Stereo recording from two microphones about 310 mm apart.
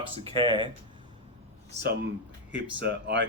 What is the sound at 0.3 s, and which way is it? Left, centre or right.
Speech, centre.